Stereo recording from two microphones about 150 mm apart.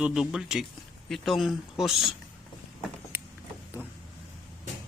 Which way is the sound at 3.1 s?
15° right (ahead or behind).